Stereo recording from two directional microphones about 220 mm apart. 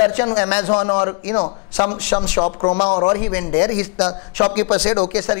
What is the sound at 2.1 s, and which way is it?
Speech, 25° left (ahead or behind).